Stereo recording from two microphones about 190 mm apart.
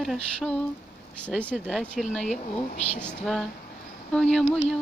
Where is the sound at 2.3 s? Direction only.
35° left (ahead or behind).